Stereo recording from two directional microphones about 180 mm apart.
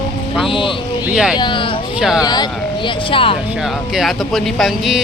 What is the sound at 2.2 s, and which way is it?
Speech, 25° left (ahead or behind).